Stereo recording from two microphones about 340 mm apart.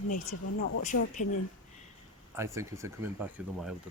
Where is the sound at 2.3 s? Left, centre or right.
Centre.